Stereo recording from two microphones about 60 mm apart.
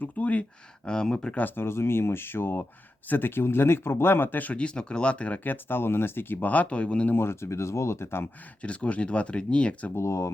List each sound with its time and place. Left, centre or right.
0.0 s speech: left
0.9 s speech: centre
1.5 s speech: left
7.1 s speech: left
8.6 s speech: left
9.9 s speech: left